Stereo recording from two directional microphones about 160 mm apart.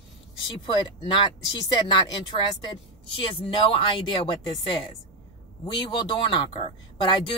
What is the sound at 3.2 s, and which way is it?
Speech, 35° left (ahead or behind).